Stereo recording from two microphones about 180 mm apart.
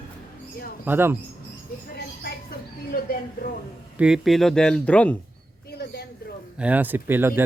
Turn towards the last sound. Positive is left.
turn(degrees=-10)  # may be behind; listen again after turning